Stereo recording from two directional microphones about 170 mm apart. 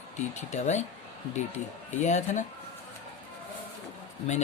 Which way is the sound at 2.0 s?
45° left (ahead or behind).